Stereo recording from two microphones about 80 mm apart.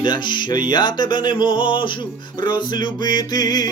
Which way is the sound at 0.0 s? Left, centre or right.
Left.